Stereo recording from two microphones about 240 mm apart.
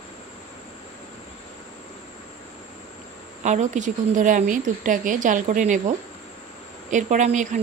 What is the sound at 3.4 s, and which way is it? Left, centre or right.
Speech, right.